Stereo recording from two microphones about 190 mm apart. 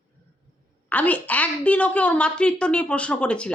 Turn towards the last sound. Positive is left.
turn(degrees=5)  # may be behind; listen again after turning